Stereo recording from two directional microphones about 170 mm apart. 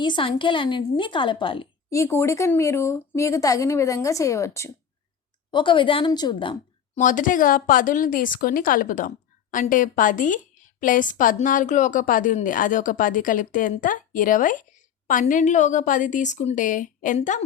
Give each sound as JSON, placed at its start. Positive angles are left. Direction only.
{"t": 0.0, "sound": "a woman's voice", "side_deg": 30}
{"t": 1.9, "sound": "speech", "side_deg": 15}
{"t": 5.5, "sound": "a woman's voice", "side_deg": 30}
{"t": 7.0, "sound": "speech", "side_deg": 50}